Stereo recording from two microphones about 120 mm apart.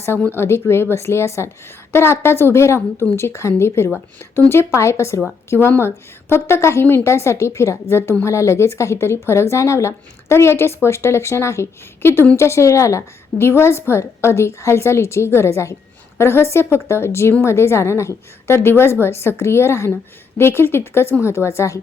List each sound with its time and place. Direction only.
0.0 s speech: 20° left (ahead or behind)